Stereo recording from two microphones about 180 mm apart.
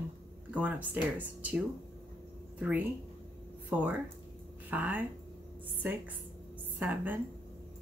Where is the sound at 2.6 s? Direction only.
10° right (ahead or behind).